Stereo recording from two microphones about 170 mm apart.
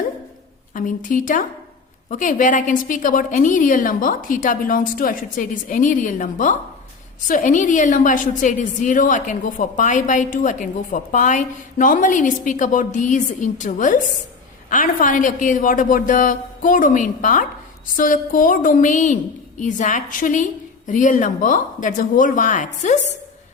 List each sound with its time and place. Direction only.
0.7 s a woman's voice: 50° left (ahead or behind)